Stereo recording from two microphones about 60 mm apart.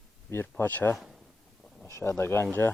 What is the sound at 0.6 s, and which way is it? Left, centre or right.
Speech, left.